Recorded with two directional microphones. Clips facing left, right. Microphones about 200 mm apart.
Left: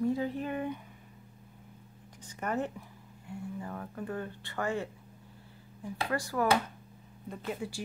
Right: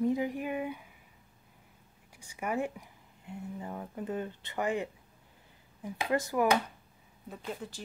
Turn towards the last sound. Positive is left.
turn(degrees=10)  # may be behind; listen again after turning